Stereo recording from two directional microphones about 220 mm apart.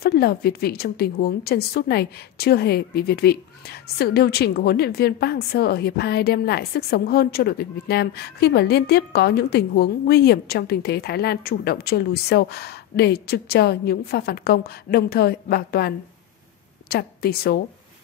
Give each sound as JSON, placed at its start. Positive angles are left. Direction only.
{"t": 0.0, "sound": "a woman's voice", "side_deg": 45}
{"t": 16.9, "sound": "a woman's voice", "side_deg": 45}